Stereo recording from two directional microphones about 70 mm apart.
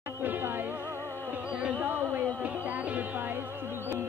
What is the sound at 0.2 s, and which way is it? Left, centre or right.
Music, right.